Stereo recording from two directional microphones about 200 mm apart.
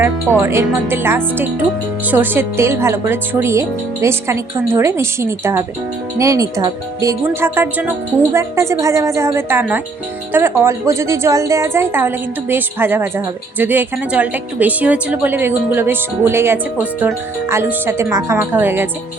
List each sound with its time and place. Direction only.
0.3 s a woman's voice: 10° right (ahead or behind)